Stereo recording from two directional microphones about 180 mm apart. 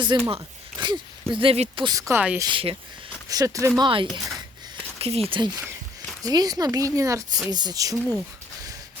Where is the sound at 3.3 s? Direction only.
20° right (ahead or behind).